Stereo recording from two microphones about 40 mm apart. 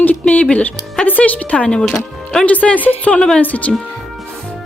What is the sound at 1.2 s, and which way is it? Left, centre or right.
Speech, left.